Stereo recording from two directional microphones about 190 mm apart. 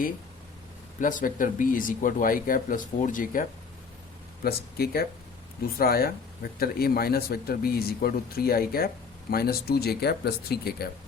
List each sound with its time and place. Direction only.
1.0 s speech: 45° left (ahead or behind)
4.4 s speech: 55° left (ahead or behind)